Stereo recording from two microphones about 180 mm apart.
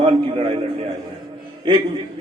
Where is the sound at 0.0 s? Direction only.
35° right (ahead or behind).